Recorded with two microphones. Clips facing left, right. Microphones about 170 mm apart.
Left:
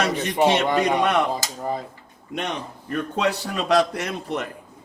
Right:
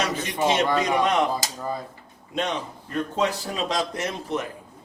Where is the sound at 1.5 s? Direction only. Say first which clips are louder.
Left 3 dB; 20° left (ahead or behind).